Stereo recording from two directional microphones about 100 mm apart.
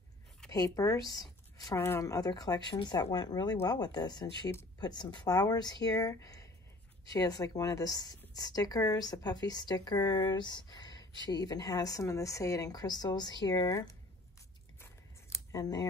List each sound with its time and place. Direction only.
0.5 s speech: 35° left (ahead or behind)
1.8 s speech: 30° left (ahead or behind)
14.8 s scissors: 30° left (ahead or behind)